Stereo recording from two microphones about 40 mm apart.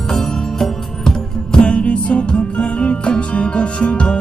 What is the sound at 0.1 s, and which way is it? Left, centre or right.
Music, centre.